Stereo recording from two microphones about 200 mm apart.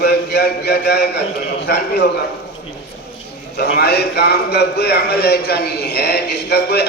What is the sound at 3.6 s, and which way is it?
A man's voice, 55° left (ahead or behind).